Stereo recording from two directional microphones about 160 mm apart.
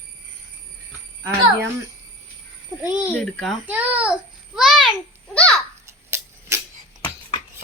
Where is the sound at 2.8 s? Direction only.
10° right (ahead or behind).